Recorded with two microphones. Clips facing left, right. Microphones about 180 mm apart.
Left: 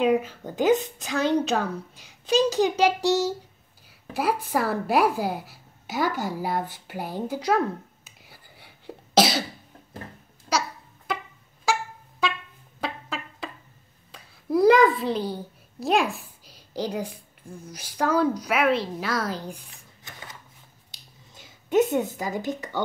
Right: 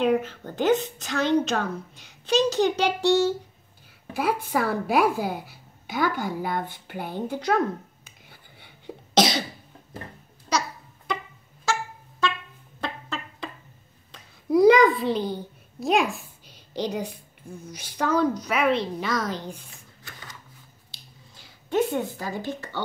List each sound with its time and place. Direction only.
0.0 s a woman's voice: 10° left (ahead or behind)
11.1 s music: 5° left (ahead or behind)
12.8 s a sound: 5° left (ahead or behind)
15.8 s a child's voice: centre (ahead or behind); by 20.2 s 15° left (ahead or behind)
21.4 s a sound: 20° left (ahead or behind)
22.4 s a woman's voice: 15° left (ahead or behind)